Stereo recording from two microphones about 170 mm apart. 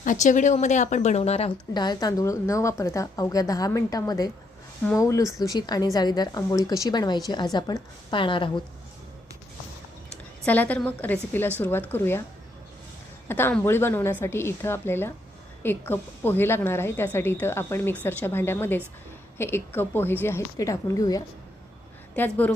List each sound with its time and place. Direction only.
0.0 s speech: 50° left (ahead or behind); by 8.6 s 30° left (ahead or behind)
10.4 s a woman's voice: 10° left (ahead or behind)
13.2 s a woman's voice: 15° left (ahead or behind)